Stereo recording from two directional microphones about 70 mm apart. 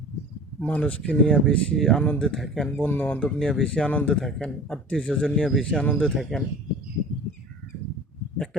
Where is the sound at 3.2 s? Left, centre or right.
Centre.